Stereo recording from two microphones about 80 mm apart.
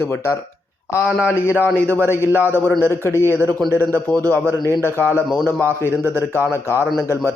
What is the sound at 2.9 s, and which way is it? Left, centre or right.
Speech, left.